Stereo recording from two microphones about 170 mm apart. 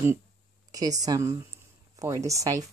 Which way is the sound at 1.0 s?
20° right (ahead or behind).